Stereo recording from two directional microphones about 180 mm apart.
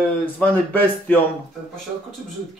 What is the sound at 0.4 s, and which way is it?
Speech, 10° left (ahead or behind).